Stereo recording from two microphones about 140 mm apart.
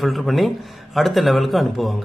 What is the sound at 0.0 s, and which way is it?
A man's voice, centre (ahead or behind).